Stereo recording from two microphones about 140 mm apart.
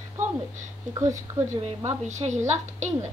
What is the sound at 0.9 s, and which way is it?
Speech, 20° right (ahead or behind).